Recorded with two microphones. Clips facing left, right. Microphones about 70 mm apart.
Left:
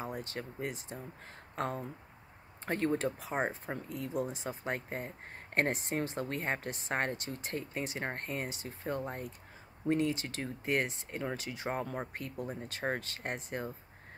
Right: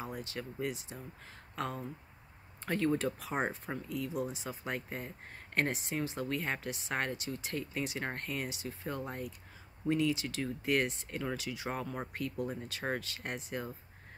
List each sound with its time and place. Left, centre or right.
0.0 s speech: left